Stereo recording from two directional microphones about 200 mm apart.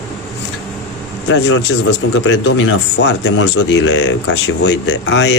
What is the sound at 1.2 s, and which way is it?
Speech, 65° left (ahead or behind).